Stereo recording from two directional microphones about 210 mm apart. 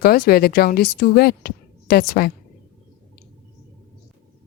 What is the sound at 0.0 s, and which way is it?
Speech, 45° left (ahead or behind).